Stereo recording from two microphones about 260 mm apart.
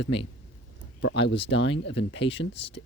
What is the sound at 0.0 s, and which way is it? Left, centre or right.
Speech, left.